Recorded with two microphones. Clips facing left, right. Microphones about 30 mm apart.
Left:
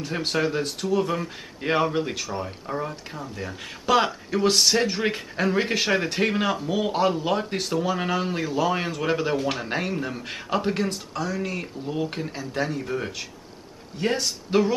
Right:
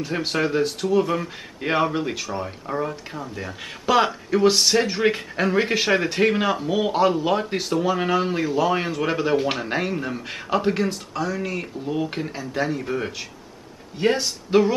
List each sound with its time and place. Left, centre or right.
0.0 s speech: centre